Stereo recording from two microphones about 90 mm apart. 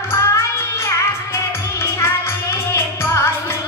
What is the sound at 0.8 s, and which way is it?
Music, 30° left (ahead or behind).